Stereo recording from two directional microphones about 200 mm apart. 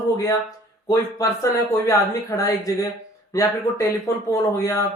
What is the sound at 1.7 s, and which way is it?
Speech, 15° left (ahead or behind).